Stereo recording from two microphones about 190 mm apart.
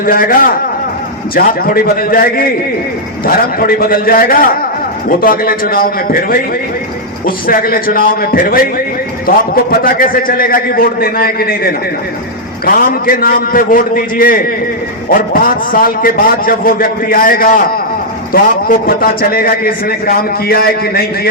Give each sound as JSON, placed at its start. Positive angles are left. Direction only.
{"t": 0.0, "sound": "a man's voice", "side_deg": 50}